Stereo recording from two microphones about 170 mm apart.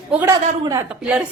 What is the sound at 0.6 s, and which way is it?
Speech, 20° right (ahead or behind).